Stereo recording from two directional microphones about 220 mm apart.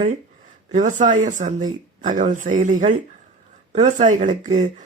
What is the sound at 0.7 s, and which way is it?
Speech, 35° right (ahead or behind).